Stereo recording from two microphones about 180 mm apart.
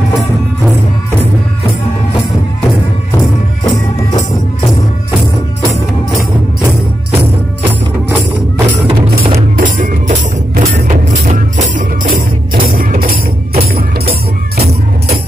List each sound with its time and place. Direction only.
9.6 s music: 50° right (ahead or behind)
12.7 s music: 55° right (ahead or behind)